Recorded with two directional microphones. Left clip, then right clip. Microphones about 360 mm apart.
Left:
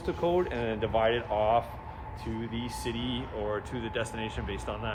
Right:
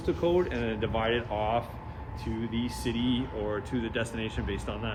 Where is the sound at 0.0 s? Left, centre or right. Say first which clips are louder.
Right 1 dB; left.